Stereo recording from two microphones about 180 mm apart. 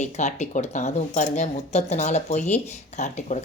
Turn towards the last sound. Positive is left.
turn(degrees=40)  # may be behind; listen again after turning